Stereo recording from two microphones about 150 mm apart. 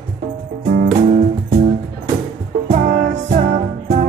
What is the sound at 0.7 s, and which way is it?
Music, 60° right (ahead or behind).